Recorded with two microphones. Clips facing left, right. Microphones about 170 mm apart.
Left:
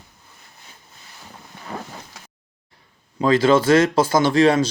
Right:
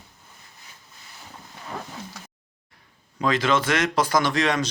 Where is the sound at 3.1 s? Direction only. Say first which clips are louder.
Left 7 dB; 30° left (ahead or behind).